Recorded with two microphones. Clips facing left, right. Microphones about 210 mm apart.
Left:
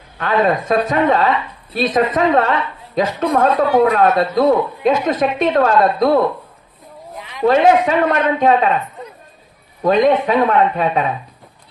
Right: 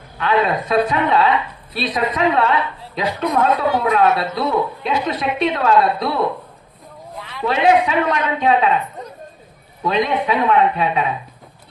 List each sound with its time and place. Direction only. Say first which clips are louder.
0.2 s a woman's voice: left 2 dB; 45° left (ahead or behind)
7.2 s a sound: right 1 dB; 15° left (ahead or behind)
7.4 s a woman's voice: left 4 dB; 45° left (ahead or behind)
9.8 s a woman's voice: left 6 dB; 45° left (ahead or behind)